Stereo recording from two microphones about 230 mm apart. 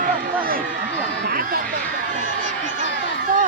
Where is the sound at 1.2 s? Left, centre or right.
Right.